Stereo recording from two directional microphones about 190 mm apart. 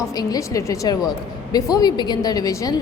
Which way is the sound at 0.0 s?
20° left (ahead or behind).